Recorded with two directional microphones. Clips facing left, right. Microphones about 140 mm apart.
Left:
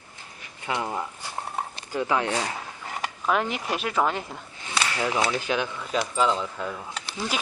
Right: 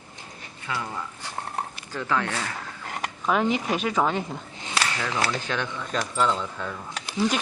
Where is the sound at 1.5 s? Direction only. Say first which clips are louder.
Left 6 dB; 15° left (ahead or behind).